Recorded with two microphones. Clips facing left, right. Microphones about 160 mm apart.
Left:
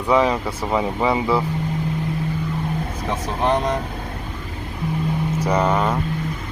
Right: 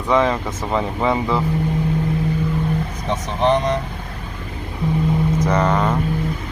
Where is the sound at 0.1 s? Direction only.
10° left (ahead or behind).